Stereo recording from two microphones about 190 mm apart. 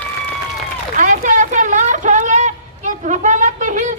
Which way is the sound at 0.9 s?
45° right (ahead or behind).